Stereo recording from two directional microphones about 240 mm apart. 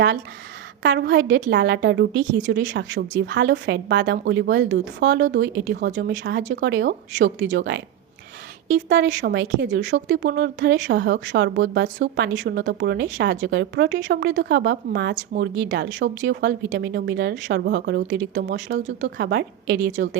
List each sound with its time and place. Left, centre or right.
0.8 s a woman's voice: right
8.9 s a woman's voice: right